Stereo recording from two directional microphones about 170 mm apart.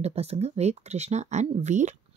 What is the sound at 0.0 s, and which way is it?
Speech, 35° right (ahead or behind).